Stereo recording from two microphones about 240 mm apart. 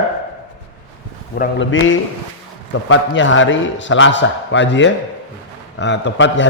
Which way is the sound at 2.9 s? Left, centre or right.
Left.